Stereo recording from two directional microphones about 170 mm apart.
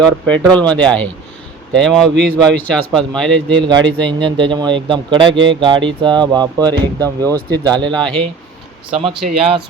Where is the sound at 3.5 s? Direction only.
25° right (ahead or behind).